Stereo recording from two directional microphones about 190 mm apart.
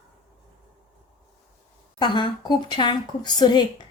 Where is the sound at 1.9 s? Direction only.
25° left (ahead or behind).